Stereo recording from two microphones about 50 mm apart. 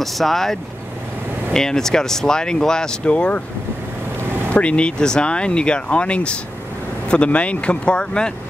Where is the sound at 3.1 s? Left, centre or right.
Left.